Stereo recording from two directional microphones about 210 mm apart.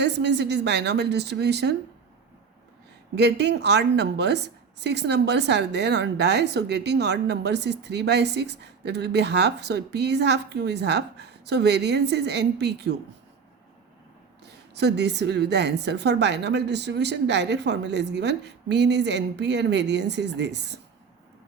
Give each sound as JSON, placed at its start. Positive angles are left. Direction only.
{"t": 0.0, "sound": "speech", "side_deg": -55}
{"t": 3.2, "sound": "speech", "side_deg": -55}
{"t": 14.4, "sound": "a woman's voice", "side_deg": -55}